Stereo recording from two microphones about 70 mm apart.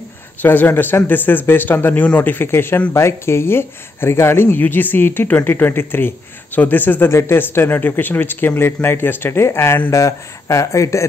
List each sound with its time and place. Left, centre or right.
0.4 s speech: left
7.1 s speech: left